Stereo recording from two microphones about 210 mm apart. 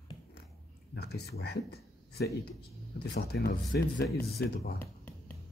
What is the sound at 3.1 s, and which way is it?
Speech, 50° left (ahead or behind).